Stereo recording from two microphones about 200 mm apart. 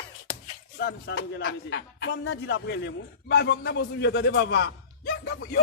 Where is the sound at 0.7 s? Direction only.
55° left (ahead or behind).